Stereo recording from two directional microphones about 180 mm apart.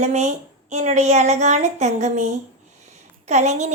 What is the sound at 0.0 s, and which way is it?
A woman's voice, 40° right (ahead or behind).